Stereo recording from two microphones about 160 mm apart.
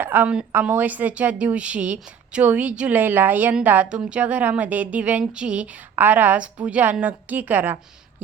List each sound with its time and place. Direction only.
0.0 s a woman's voice: 10° right (ahead or behind)